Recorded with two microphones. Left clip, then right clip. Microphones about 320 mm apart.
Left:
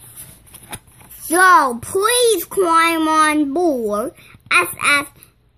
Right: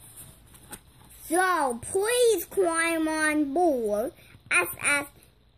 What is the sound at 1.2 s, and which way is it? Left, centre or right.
A child's voice, centre.